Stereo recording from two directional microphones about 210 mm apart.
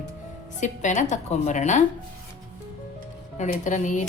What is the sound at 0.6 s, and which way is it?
A woman's voice, 35° left (ahead or behind).